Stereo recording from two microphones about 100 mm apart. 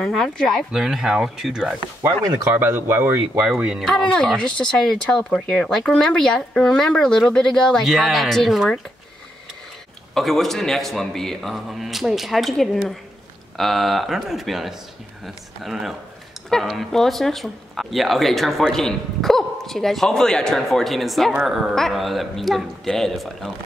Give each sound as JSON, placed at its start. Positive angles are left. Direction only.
{"t": 0.0, "sound": "speech", "side_deg": 5}
{"t": 2.5, "sound": "speech", "side_deg": -20}
{"t": 3.5, "sound": "speech", "side_deg": -5}
{"t": 3.8, "sound": "speech", "side_deg": 5}
{"t": 10.1, "sound": "speech", "side_deg": 0}